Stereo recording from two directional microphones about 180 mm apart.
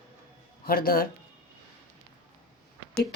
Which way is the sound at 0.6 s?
55° left (ahead or behind).